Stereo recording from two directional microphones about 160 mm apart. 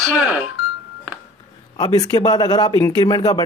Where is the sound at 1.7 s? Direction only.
25° left (ahead or behind).